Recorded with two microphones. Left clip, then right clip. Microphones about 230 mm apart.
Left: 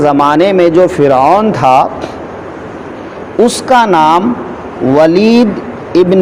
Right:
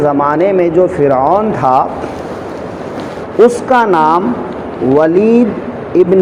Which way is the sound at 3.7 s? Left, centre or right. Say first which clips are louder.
Left 2 dB; left.